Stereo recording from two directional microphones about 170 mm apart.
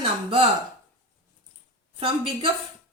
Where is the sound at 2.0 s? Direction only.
30° right (ahead or behind).